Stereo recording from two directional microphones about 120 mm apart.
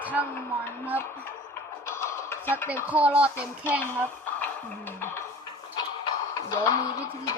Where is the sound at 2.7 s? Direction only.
10° right (ahead or behind).